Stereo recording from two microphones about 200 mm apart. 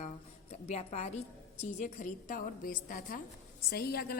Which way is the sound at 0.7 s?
30° left (ahead or behind).